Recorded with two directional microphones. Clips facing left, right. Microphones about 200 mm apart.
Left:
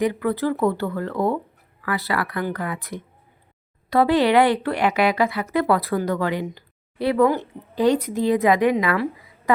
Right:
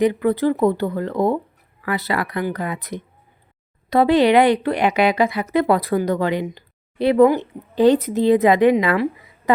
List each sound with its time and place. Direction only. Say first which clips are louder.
0.0 s a woman's voice: right 4 dB; 20° right (ahead or behind)